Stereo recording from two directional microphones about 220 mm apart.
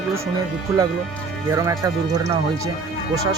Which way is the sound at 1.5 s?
15° right (ahead or behind).